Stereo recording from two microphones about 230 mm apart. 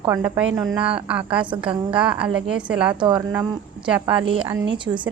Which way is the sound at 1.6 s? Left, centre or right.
Right.